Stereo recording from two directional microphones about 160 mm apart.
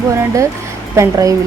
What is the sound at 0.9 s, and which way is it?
Speech, 20° right (ahead or behind).